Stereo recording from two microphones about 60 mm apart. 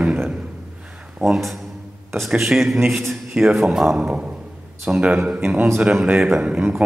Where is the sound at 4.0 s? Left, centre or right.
Centre.